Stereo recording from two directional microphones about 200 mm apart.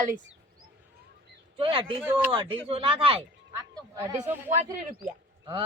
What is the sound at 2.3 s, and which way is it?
Speech, 25° right (ahead or behind).